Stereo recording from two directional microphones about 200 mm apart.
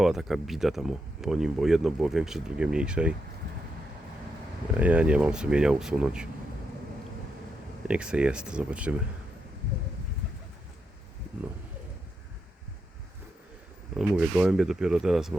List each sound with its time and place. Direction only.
0.0 s speech: centre (ahead or behind)
4.8 s speech: 5° right (ahead or behind)
7.9 s speech: 5° right (ahead or behind)
13.9 s speech: 5° right (ahead or behind)